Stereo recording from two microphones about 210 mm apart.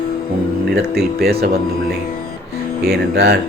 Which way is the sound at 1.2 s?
45° right (ahead or behind).